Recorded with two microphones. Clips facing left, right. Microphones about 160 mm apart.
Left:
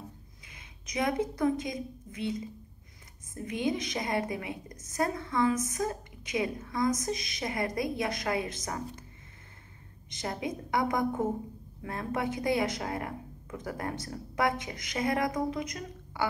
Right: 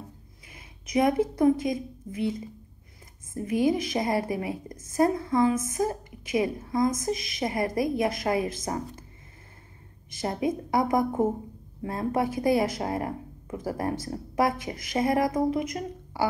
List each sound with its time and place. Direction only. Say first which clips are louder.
0.5 s a woman's voice: right 11 dB; 30° right (ahead or behind)
3.7 s a woman's voice: right 5 dB; 30° right (ahead or behind)
10.2 s a woman's voice: right 7 dB; 25° right (ahead or behind)